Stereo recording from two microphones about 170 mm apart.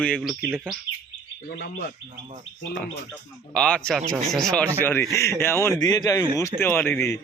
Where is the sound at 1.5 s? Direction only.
60° left (ahead or behind).